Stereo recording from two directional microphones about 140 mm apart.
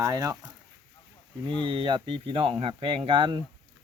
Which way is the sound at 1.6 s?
40° right (ahead or behind).